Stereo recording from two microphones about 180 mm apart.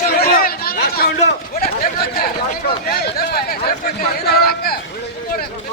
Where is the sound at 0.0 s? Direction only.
55° left (ahead or behind).